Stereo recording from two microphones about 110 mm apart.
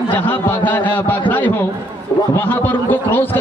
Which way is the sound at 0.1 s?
15° left (ahead or behind).